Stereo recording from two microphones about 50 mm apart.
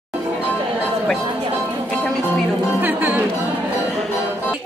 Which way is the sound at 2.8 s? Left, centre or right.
Right.